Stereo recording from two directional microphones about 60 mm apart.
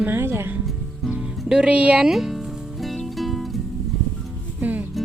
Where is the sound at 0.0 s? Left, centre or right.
Right.